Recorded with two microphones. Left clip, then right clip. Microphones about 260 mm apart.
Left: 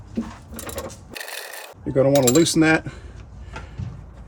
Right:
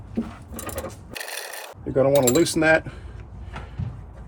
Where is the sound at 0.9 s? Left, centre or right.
Centre.